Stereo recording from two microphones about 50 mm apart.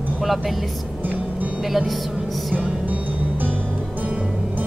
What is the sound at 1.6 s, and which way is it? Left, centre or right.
Speech, centre.